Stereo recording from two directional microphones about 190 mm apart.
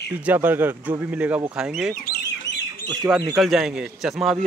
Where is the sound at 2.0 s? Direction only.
55° left (ahead or behind).